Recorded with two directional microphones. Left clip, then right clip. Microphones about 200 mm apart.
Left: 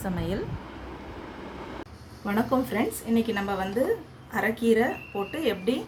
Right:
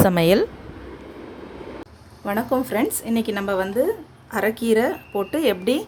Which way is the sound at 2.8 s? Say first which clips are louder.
Right 4 dB; 60° right (ahead or behind).